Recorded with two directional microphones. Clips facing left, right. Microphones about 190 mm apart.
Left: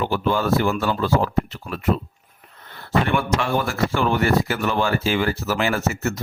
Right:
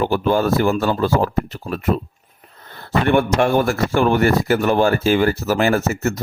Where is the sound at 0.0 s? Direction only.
45° right (ahead or behind).